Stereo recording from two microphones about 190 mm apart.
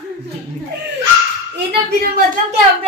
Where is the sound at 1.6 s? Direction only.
55° right (ahead or behind).